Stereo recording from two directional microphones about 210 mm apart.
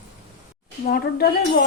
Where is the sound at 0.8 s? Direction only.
45° left (ahead or behind).